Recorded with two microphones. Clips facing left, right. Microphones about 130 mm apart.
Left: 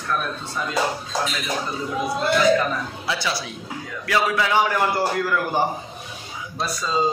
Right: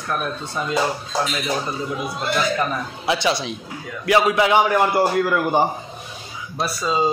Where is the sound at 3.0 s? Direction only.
20° right (ahead or behind).